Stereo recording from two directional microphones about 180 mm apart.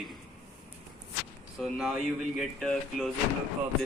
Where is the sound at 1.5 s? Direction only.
Centre (ahead or behind).